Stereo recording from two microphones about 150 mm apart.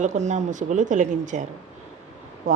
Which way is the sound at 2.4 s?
50° right (ahead or behind).